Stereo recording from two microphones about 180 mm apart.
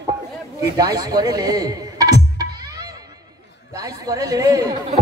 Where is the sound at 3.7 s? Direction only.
20° right (ahead or behind).